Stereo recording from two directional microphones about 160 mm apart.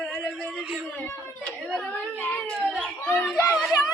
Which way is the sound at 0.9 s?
10° left (ahead or behind).